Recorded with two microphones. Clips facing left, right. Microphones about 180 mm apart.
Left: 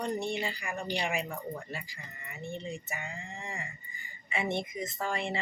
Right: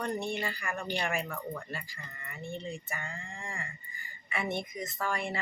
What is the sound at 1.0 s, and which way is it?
Speech, 15° left (ahead or behind).